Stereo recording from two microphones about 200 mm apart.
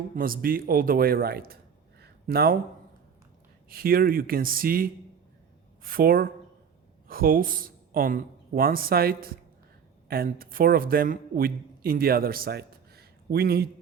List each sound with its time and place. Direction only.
0.2 s speech: 45° right (ahead or behind)
2.0 s a sound: 50° right (ahead or behind)
3.7 s speech: 45° right (ahead or behind)